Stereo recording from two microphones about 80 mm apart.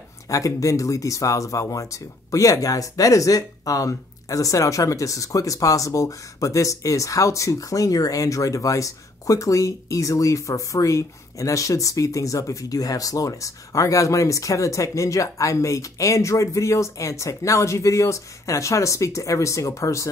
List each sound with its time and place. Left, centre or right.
0.3 s speech: left